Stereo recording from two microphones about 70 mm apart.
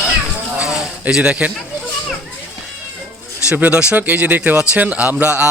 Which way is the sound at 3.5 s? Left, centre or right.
Right.